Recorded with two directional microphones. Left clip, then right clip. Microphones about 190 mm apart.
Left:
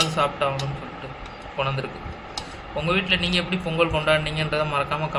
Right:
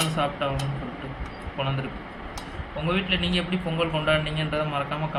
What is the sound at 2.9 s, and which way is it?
A man's voice, 55° left (ahead or behind).